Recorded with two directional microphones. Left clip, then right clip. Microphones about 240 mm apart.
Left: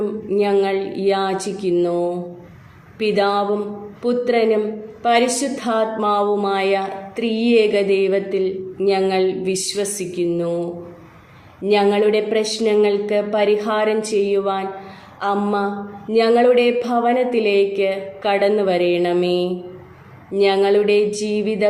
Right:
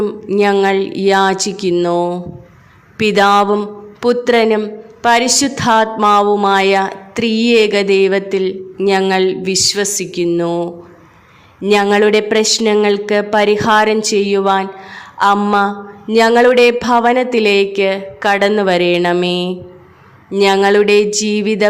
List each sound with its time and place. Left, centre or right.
0.0 s a woman's voice: right